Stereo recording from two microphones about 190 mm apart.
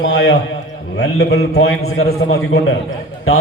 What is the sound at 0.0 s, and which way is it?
Speech, 85° left.